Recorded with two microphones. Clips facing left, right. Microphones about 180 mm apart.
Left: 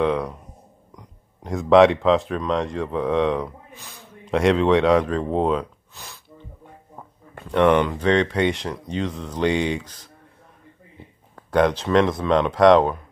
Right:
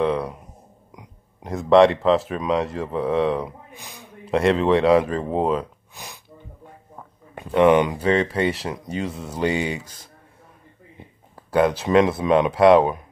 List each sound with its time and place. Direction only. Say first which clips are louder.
0.0 s a sound: even; centre (ahead or behind)
0.9 s speech: right 2 dB; 5° right (ahead or behind)
3.4 s speech: even; 15° right (ahead or behind)
4.3 s speech: left 1 dB; centre (ahead or behind)
5.9 s sneeze: right 2 dB; 15° right (ahead or behind)
7.4 s speech: right 2 dB; 10° right (ahead or behind)
11.3 s speech: even; 5° right (ahead or behind)